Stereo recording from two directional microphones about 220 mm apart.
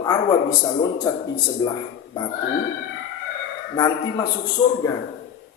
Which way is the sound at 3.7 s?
15° left (ahead or behind).